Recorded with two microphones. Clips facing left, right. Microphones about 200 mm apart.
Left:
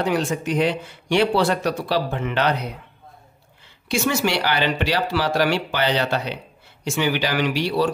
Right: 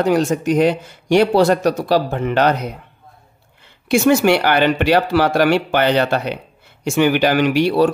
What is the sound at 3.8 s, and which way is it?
Speech, 55° right (ahead or behind).